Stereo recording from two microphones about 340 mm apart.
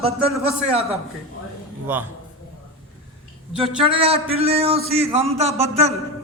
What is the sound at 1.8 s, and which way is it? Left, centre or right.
Speech, centre.